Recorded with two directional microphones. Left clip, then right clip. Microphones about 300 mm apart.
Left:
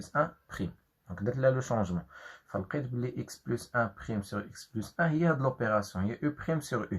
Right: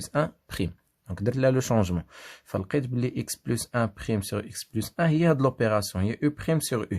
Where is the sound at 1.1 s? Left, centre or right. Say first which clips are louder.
Right 4 dB; right.